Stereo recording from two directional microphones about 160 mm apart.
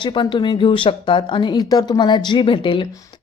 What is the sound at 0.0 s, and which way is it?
A woman's voice, 30° left (ahead or behind).